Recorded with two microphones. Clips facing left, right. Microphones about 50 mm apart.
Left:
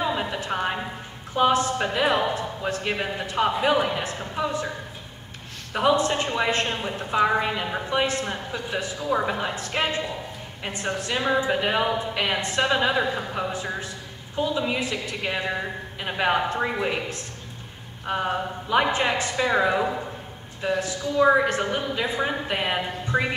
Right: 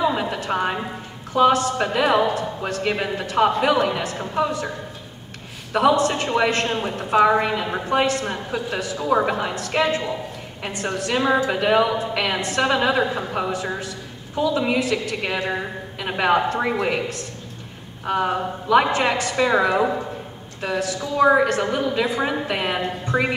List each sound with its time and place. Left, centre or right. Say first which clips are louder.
0.0 s a sound: right 4 dB; right
1.3 s a woman's voice: right 4 dB; right
5.7 s a woman's voice: right 4 dB; right